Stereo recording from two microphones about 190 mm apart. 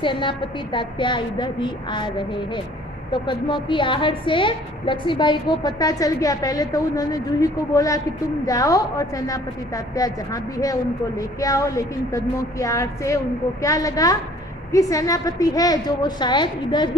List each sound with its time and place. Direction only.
0.0 s a woman's voice: 25° left (ahead or behind)